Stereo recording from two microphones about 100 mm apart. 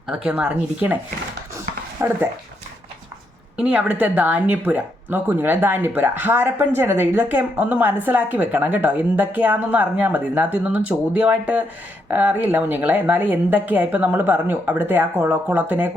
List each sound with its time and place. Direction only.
0.3 s speech: 10° right (ahead or behind)
1.5 s a sound: 25° right (ahead or behind)
3.6 s a woman's voice: 10° right (ahead or behind)